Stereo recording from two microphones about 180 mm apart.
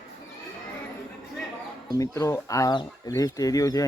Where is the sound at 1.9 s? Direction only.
20° left (ahead or behind).